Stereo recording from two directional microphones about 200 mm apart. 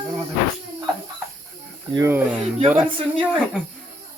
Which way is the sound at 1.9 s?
15° right (ahead or behind).